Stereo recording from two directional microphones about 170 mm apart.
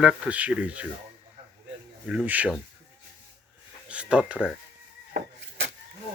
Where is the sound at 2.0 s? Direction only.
5° right (ahead or behind).